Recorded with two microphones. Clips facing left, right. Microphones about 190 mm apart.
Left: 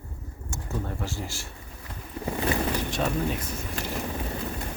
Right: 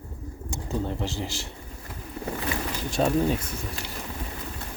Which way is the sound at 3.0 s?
30° right (ahead or behind).